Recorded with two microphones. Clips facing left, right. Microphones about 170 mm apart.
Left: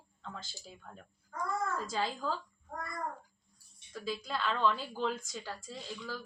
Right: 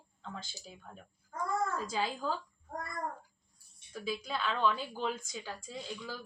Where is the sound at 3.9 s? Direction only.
5° right (ahead or behind).